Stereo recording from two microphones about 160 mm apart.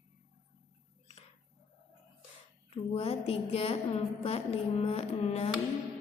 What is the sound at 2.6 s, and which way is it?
A woman's voice, 40° left (ahead or behind).